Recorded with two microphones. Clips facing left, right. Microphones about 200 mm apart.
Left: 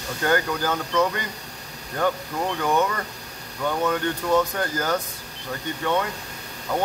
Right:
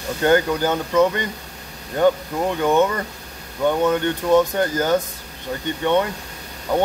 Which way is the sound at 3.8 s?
25° right (ahead or behind).